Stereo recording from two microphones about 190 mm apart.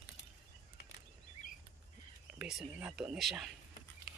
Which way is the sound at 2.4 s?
5° right (ahead or behind).